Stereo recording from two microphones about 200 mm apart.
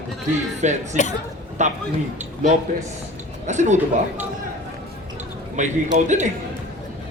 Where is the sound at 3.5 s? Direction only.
35° right (ahead or behind).